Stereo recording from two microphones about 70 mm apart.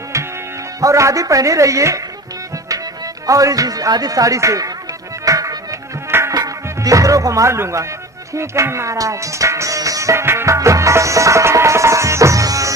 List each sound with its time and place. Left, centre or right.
0.1 s music: right
0.7 s speech: right
3.3 s a man's voice: right
5.2 s music: right
6.0 s music: right
6.3 s music: right
8.4 s speech: right
8.9 s music: right